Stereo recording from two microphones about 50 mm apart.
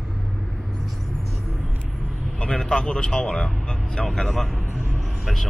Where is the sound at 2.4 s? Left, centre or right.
Centre.